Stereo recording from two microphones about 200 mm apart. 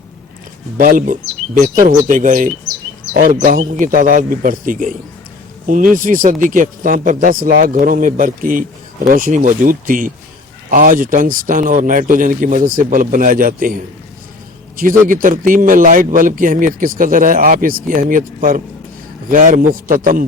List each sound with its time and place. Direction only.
0.8 s a man's voice: 40° right (ahead or behind)
15.0 s a man's voice: 40° right (ahead or behind)